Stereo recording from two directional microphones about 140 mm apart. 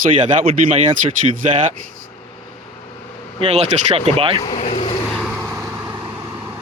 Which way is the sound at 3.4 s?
45° right (ahead or behind).